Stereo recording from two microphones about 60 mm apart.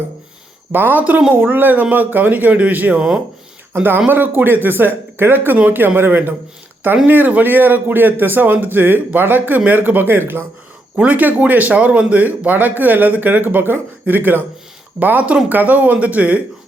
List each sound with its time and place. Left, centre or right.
0.7 s speech: right
4.1 s speech: right
10.9 s speech: right